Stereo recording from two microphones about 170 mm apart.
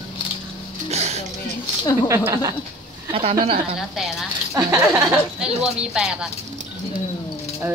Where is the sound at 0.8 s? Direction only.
40° right (ahead or behind).